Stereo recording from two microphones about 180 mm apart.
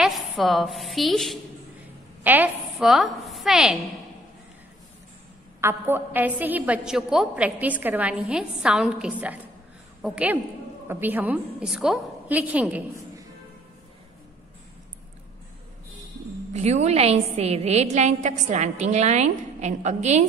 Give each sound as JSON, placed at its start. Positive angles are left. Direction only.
{"t": 0.0, "sound": "a woman's voice", "side_deg": 0}
{"t": 2.2, "sound": "a woman's voice", "side_deg": -10}
{"t": 5.6, "sound": "a woman's voice", "side_deg": -10}
{"t": 16.5, "sound": "a woman's voice", "side_deg": -40}